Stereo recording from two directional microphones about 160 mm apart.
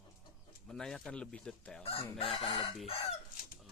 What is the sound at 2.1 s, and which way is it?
Chicken, 40° left (ahead or behind).